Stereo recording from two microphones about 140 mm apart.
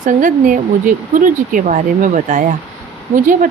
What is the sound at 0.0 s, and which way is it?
Speech, 65° right (ahead or behind).